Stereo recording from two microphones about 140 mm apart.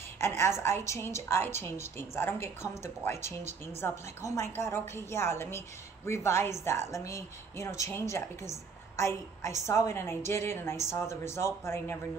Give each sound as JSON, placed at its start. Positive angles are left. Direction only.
{"t": 0.2, "sound": "a woman's voice", "side_deg": 20}